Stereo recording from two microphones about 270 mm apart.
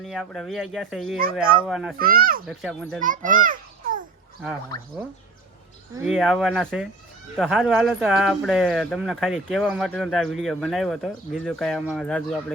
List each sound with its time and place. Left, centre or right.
0.0 s speech: centre
2.0 s a child's voice: right
2.5 s speech: centre
3.0 s a child's voice: right
4.7 s speech: centre
6.0 s speech: centre